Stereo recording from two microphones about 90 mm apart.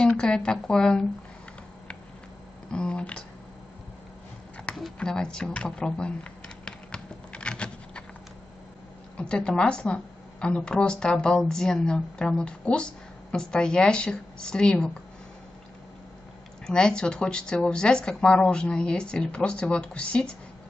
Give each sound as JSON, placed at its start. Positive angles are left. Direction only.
{"t": 0.0, "sound": "a woman's voice", "side_deg": 10}
{"t": 2.7, "sound": "a woman's voice", "side_deg": 10}
{"t": 4.9, "sound": "a woman's voice", "side_deg": 10}
{"t": 6.6, "sound": "a sound", "side_deg": 10}
{"t": 9.1, "sound": "a woman's voice", "side_deg": 10}
{"t": 16.6, "sound": "a woman's voice", "side_deg": 10}